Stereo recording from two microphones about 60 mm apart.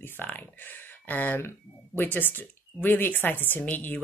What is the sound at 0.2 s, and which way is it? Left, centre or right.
Speech, left.